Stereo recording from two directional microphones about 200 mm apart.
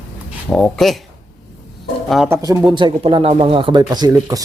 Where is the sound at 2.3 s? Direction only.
15° right (ahead or behind).